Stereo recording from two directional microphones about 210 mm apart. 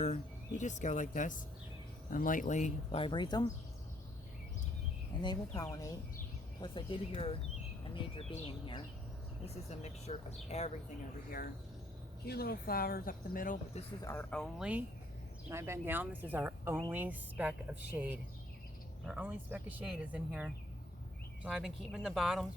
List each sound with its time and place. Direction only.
0.0 s speech: 35° left (ahead or behind); by 3.5 s 20° left (ahead or behind)
5.2 s speech: 20° left (ahead or behind)
9.6 s speech: 30° left (ahead or behind)
12.2 s speech: 50° left (ahead or behind)
14.0 s speech: 10° left (ahead or behind)